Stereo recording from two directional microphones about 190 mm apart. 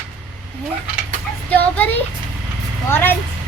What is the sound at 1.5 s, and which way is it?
A child's voice, 10° left (ahead or behind).